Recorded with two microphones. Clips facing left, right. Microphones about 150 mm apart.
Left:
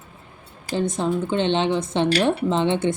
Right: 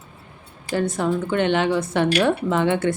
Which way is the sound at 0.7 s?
20° left (ahead or behind).